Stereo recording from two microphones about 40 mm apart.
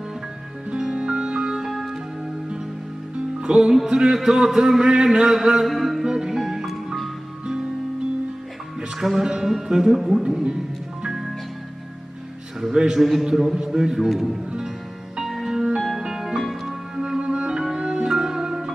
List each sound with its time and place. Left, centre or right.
0.7 s music: centre
1.7 s music: centre
3.2 s music: right
3.9 s a man's voice: centre
5.7 s music: centre
9.0 s a man's voice: centre
10.4 s music: centre
12.5 s a man's voice: centre
14.0 s speech: centre
15.2 s music: centre